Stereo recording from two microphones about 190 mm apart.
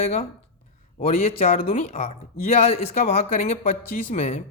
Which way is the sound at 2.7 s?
35° left (ahead or behind).